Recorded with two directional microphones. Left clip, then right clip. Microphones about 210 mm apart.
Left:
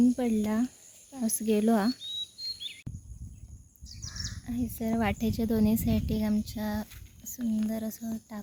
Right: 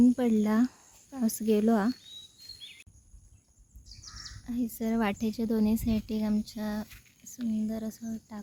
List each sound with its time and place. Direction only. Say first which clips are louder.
0.0 s a woman's voice: right 2 dB; 10° right (ahead or behind)
2.7 s a sound: left 8 dB; 50° left (ahead or behind)
4.4 s a woman's voice: right 1 dB; 10° right (ahead or behind)